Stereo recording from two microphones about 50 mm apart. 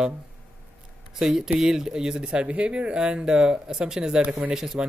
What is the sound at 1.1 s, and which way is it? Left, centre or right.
Speech, centre.